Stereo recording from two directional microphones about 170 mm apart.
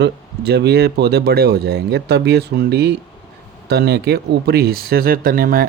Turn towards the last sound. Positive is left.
turn(degrees=-55)  # may be behind; listen again after turning